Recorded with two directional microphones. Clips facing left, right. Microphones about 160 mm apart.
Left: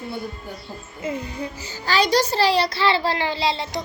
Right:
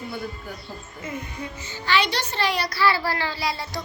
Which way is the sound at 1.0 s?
30° left (ahead or behind).